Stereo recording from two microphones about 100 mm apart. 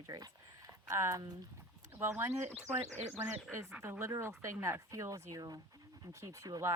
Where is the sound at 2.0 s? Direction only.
20° right (ahead or behind).